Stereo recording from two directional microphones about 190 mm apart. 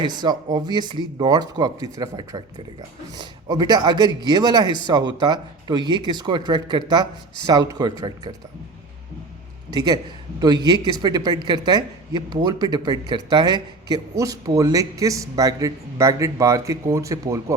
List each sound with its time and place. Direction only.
0.0 s speech: 20° right (ahead or behind)
9.6 s a man's voice: 20° right (ahead or behind)